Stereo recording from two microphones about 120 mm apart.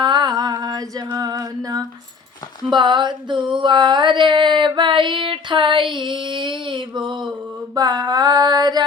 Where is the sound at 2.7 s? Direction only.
40° right (ahead or behind).